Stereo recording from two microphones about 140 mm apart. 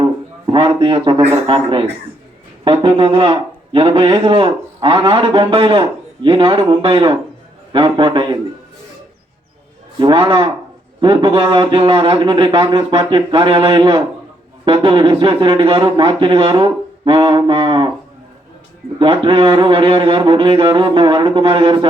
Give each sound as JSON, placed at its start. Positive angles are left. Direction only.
{"t": 0.0, "sound": "a sound", "side_deg": -35}
{"t": 2.6, "sound": "speech", "side_deg": -40}
{"t": 10.0, "sound": "speech", "side_deg": -35}
{"t": 18.9, "sound": "speech", "side_deg": -35}